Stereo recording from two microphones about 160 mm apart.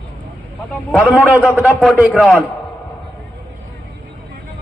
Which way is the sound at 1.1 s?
10° right (ahead or behind).